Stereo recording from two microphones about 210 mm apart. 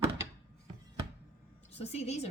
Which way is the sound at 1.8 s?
30° left (ahead or behind).